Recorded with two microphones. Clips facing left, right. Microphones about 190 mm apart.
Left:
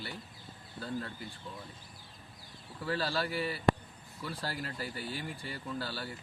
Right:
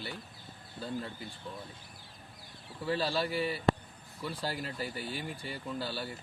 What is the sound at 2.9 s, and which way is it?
Speech, 20° right (ahead or behind).